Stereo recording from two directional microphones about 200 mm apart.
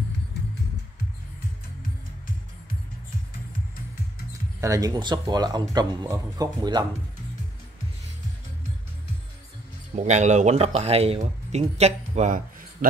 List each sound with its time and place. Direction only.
4.3 s speech: 15° right (ahead or behind)
9.9 s speech: 35° right (ahead or behind)